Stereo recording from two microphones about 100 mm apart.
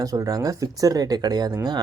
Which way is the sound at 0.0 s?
35° right (ahead or behind).